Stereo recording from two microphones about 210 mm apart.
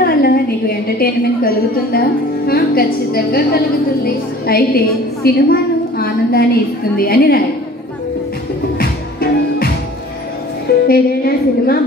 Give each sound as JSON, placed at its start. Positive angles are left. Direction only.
{"t": 0.0, "sound": "a sound", "side_deg": 45}
{"t": 0.9, "sound": "a woman's voice", "side_deg": 45}
{"t": 8.7, "sound": "music", "side_deg": 45}
{"t": 10.9, "sound": "a woman's voice", "side_deg": 45}